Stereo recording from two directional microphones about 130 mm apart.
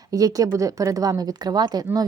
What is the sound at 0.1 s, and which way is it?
A woman's voice, 25° right (ahead or behind).